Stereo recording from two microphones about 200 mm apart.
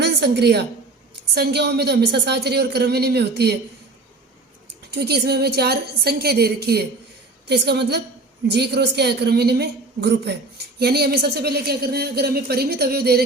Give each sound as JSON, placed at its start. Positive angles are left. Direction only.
{"t": 0.0, "sound": "a woman's voice", "side_deg": -55}
{"t": 4.9, "sound": "a woman's voice", "side_deg": -55}